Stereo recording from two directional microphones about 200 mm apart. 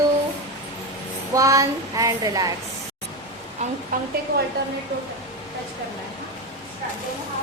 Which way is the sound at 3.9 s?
45° right (ahead or behind).